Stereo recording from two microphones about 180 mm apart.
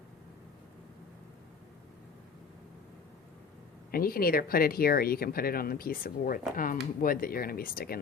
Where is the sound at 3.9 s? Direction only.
55° left (ahead or behind).